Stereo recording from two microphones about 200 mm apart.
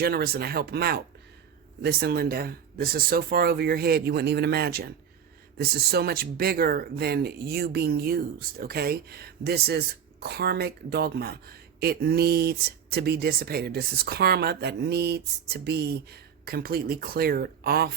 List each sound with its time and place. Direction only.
0.0 s speech: 50° right (ahead or behind)